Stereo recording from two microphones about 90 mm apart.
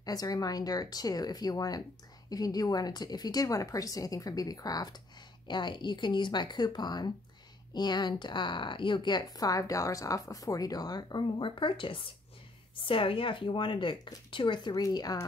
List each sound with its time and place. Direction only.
0.0 s a woman's voice: 45° left (ahead or behind)
5.5 s a woman's voice: 55° left (ahead or behind)
14.8 s a woman's voice: 45° left (ahead or behind)